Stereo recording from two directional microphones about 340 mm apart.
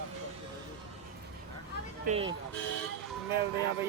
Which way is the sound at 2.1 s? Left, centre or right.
Centre.